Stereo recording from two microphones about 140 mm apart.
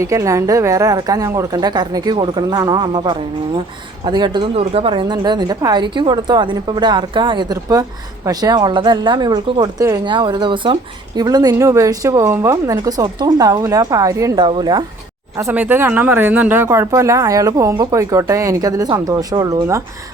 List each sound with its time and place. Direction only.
0.0 s a woman's voice: 25° right (ahead or behind)
4.6 s a woman's voice: 45° right (ahead or behind)
15.4 s speech: 15° right (ahead or behind)